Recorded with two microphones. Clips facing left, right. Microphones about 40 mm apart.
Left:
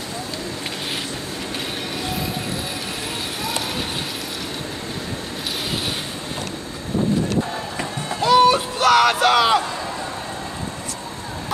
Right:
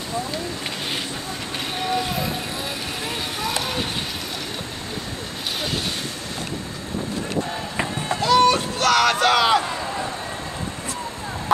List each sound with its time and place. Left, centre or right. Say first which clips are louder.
7.7 s run: right 2 dB; centre
8.2 s crowd: left 2 dB; centre